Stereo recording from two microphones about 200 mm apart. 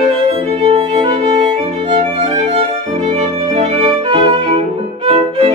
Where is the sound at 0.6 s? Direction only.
25° right (ahead or behind).